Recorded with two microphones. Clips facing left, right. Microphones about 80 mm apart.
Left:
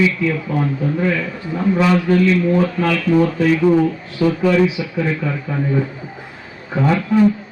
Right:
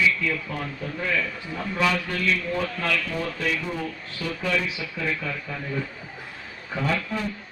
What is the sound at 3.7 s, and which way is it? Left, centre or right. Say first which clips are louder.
Speech: left 17 dB; left.